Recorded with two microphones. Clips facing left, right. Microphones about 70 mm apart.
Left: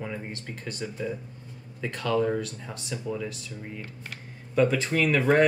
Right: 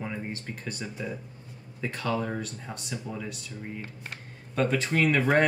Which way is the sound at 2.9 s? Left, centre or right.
Right.